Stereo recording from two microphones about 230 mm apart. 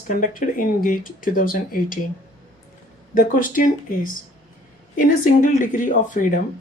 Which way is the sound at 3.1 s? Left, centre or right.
Left.